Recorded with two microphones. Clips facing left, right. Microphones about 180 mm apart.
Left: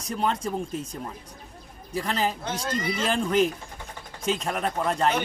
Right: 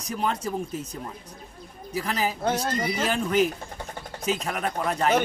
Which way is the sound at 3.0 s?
5° right (ahead or behind).